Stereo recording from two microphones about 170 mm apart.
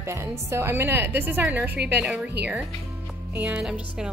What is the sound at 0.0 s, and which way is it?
A woman's voice, 15° right (ahead or behind).